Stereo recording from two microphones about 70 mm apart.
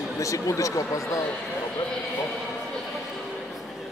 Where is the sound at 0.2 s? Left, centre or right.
Left.